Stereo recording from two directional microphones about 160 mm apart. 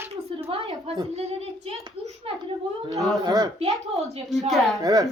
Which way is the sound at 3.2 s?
25° right (ahead or behind).